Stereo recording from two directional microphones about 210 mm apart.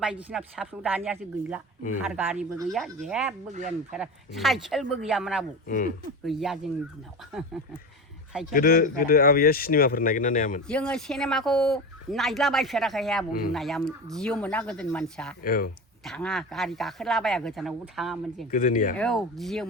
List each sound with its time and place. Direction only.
0.0 s speech: 5° right (ahead or behind)
5.6 s speech: 40° left (ahead or behind)
6.2 s speech: centre (ahead or behind)
8.5 s speech: 45° left (ahead or behind)
10.7 s speech: 5° left (ahead or behind)
15.4 s speech: 40° left (ahead or behind)
16.0 s speech: centre (ahead or behind)
18.5 s speech: 40° left (ahead or behind)
18.9 s speech: centre (ahead or behind)